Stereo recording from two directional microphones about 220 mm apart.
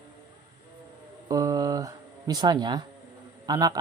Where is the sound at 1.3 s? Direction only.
15° right (ahead or behind).